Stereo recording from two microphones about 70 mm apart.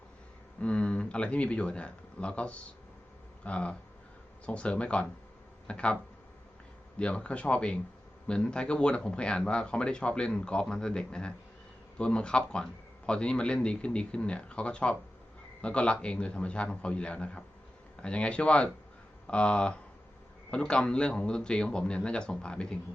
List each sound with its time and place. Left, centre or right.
0.6 s speech: centre
7.0 s speech: centre